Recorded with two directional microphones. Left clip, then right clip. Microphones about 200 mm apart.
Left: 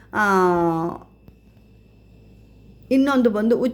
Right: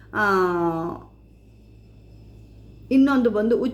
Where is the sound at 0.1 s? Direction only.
35° left (ahead or behind).